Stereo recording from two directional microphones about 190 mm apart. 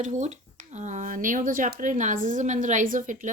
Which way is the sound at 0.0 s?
40° right (ahead or behind).